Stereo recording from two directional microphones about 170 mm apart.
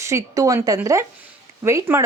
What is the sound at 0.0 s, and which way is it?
Speech, 20° right (ahead or behind).